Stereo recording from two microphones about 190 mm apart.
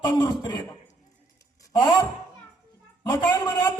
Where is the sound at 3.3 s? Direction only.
20° left (ahead or behind).